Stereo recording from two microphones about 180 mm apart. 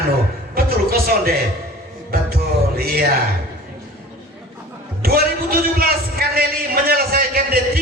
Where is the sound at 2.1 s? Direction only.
55° right (ahead or behind).